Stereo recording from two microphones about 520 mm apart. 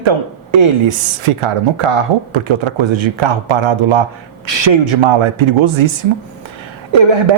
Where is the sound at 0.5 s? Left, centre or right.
Right.